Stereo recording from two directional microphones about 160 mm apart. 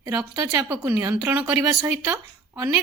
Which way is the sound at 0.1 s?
20° right (ahead or behind).